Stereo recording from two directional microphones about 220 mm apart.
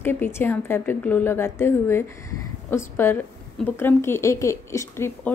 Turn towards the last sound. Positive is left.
turn(degrees=10)  # may be behind; listen again after turning